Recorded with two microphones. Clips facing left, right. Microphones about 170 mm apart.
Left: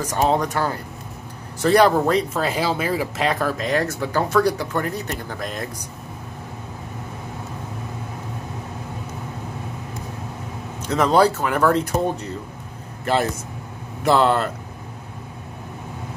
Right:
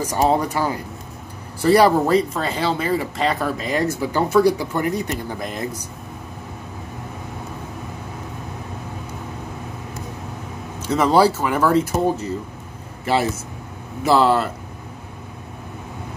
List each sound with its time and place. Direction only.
0.0 s speech: 10° right (ahead or behind)
10.8 s speech: 5° right (ahead or behind)